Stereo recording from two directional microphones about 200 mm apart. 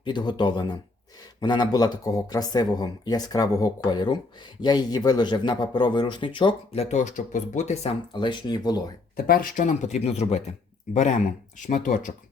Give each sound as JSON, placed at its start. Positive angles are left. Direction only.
{"t": 0.0, "sound": "speech", "side_deg": 20}
{"t": 9.1, "sound": "speech", "side_deg": 45}